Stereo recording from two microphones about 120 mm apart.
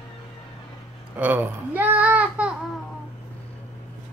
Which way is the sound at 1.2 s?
15° right (ahead or behind).